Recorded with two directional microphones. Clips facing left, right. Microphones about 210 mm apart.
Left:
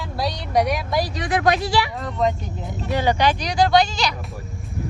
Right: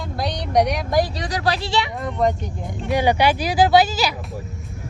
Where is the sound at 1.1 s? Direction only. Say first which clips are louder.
Left 3 dB; 35° right (ahead or behind).